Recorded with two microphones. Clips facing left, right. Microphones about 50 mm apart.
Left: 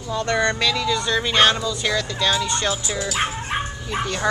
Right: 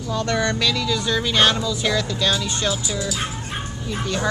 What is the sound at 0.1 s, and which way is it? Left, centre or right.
Speech, centre.